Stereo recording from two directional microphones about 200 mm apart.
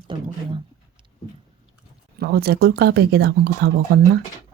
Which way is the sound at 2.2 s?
50° right (ahead or behind).